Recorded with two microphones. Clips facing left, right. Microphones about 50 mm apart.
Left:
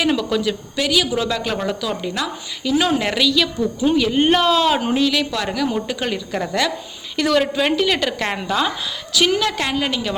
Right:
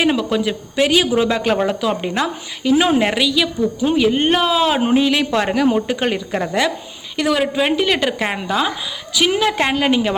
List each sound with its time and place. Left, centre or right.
0.0 s a woman's voice: centre
4.8 s a woman's voice: right; by 8.7 s centre
9.3 s a woman's voice: right